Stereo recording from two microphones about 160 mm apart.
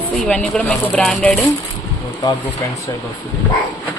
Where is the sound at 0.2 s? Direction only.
5° left (ahead or behind).